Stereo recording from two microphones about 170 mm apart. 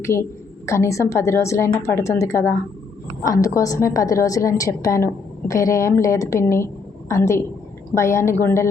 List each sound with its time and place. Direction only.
0.0 s a woman's voice: 15° left (ahead or behind)